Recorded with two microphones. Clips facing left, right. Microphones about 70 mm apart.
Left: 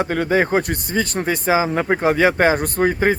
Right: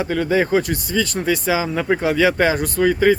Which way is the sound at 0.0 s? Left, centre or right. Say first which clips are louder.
Even; left.